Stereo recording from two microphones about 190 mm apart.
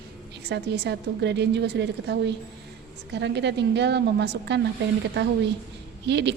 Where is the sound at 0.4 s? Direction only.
60° right (ahead or behind).